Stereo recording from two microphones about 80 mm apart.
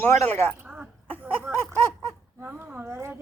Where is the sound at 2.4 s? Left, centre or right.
Right.